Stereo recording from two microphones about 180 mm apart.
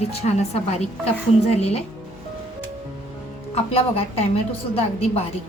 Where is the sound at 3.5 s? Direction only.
35° left (ahead or behind).